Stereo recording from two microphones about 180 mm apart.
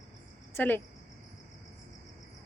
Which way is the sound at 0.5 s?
10° left (ahead or behind).